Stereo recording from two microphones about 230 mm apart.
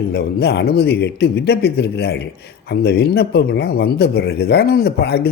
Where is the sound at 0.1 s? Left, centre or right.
Left.